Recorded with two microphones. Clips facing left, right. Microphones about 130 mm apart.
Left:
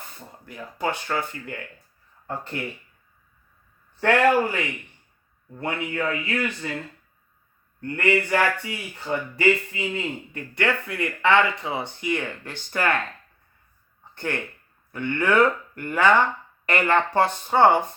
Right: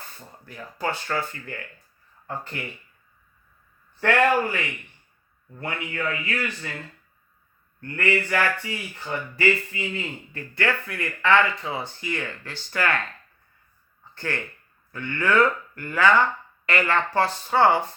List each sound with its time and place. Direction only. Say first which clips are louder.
0.0 s a man's voice: left 1 dB; 20° left (ahead or behind)
4.0 s a man's voice: left 2 dB; 25° left (ahead or behind)
7.8 s a man's voice: left 2 dB; 20° left (ahead or behind)
14.2 s a man's voice: left 2 dB; 20° left (ahead or behind)